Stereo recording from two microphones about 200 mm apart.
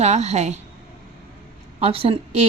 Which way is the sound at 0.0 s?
35° right (ahead or behind).